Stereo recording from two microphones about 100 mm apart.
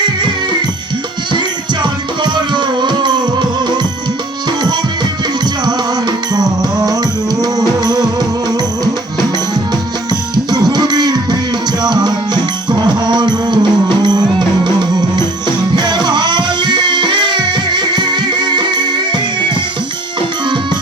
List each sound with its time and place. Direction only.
1.8 s music: 50° right (ahead or behind)
5.6 s music: 45° right (ahead or behind)
10.3 s music: 45° right (ahead or behind)